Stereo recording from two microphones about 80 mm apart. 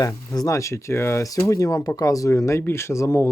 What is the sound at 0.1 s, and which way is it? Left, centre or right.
Speech, left.